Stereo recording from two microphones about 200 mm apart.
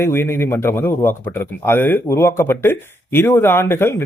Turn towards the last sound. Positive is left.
turn(degrees=10)  # may be behind; listen again after turning